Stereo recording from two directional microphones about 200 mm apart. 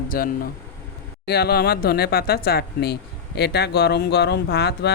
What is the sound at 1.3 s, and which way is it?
Speech, 55° left (ahead or behind).